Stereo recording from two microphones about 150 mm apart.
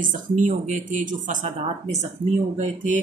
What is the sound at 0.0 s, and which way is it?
Speech, 60° right (ahead or behind).